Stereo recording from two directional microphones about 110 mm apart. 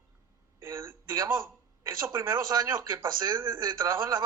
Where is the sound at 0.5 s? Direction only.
25° right (ahead or behind).